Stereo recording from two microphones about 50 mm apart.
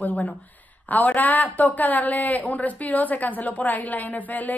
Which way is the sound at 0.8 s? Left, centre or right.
Left.